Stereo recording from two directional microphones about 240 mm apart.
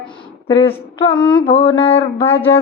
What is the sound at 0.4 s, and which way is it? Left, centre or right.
Speech, left.